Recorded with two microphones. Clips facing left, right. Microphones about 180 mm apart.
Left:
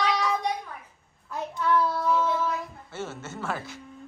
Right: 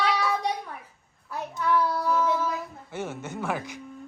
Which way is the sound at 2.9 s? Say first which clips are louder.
Right 3 dB; 15° right (ahead or behind).